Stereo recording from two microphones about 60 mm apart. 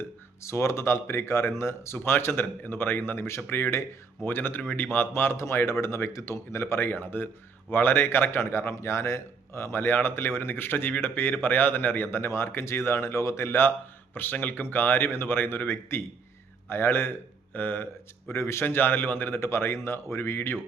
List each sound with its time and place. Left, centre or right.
0.4 s a man's voice: left
14.6 s a man's voice: left
18.3 s speech: left
18.6 s a man's voice: left